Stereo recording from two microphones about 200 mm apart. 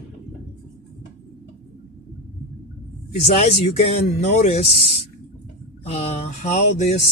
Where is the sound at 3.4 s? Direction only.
30° left (ahead or behind).